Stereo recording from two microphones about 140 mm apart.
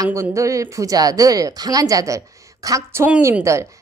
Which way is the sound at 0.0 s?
20° right (ahead or behind).